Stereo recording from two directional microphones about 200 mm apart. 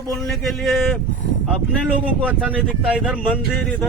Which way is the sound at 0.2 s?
Centre (ahead or behind).